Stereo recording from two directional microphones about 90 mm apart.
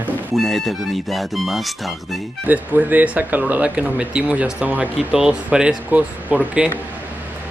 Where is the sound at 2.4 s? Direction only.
20° right (ahead or behind).